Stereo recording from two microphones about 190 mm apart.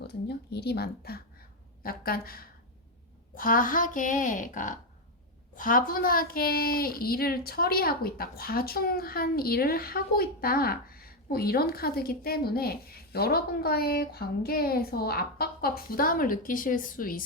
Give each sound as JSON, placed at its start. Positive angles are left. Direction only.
{"t": 0.1, "sound": "a woman's voice", "side_deg": 60}